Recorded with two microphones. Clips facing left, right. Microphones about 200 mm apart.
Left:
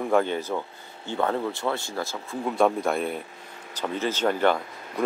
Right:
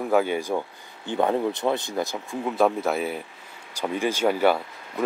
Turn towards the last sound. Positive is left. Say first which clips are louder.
# even
turn(degrees=-10)  # may be behind; listen again after turning